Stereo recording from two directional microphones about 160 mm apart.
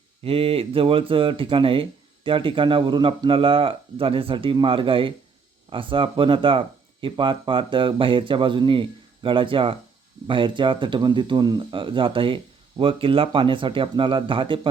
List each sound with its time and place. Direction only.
0.2 s speech: 35° right (ahead or behind)